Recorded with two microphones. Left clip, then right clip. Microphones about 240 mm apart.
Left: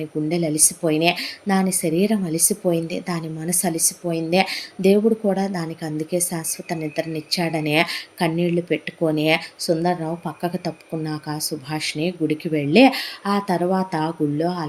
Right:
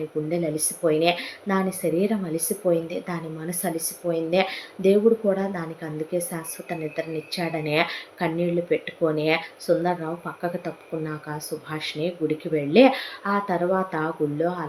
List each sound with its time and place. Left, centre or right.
0.3 s speech: left